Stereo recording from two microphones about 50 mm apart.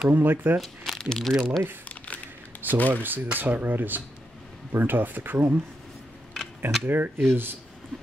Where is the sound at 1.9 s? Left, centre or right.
Left.